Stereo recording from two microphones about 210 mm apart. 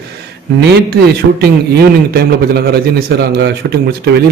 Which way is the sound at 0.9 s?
50° right (ahead or behind).